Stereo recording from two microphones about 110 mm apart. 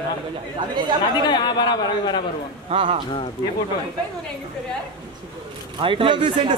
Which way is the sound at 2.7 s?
55° right (ahead or behind).